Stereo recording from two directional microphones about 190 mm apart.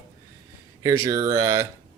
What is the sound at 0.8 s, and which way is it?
Speech, 15° right (ahead or behind).